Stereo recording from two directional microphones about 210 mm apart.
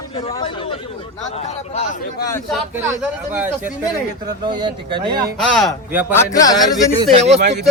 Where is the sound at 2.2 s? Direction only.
15° left (ahead or behind).